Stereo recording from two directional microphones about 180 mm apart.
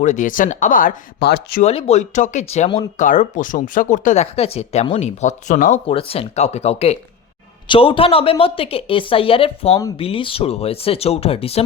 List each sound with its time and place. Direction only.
0.0 s speech: 45° left (ahead or behind); by 1.6 s 65° left (ahead or behind)
1.6 s a woman's voice: 35° left (ahead or behind)
3.0 s speech: 45° left (ahead or behind)
5.9 s a woman's voice: 30° left (ahead or behind)